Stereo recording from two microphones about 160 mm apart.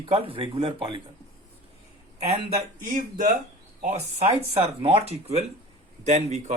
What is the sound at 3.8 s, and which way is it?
A man's voice, 45° right (ahead or behind).